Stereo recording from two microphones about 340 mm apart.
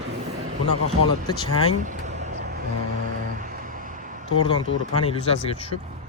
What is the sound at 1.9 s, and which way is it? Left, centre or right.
Vehicle, centre.